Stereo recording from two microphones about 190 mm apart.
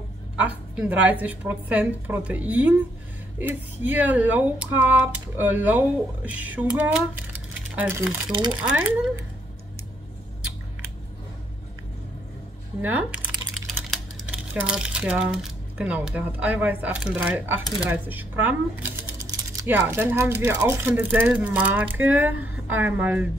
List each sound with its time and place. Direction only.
0.4 s speech: 5° right (ahead or behind)
8.3 s speech: 25° right (ahead or behind)
12.8 s typing: 10° right (ahead or behind)
13.8 s speech: 5° right (ahead or behind)